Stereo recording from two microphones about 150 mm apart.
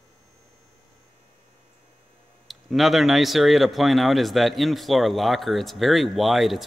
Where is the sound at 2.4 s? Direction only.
Centre (ahead or behind).